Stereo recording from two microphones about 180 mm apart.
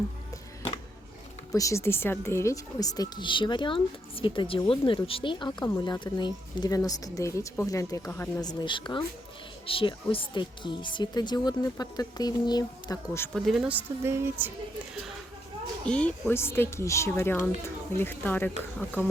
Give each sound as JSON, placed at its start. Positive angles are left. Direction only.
{"t": 1.5, "sound": "speech", "side_deg": 15}
{"t": 13.4, "sound": "a woman's voice", "side_deg": -5}
{"t": 15.9, "sound": "speech", "side_deg": 5}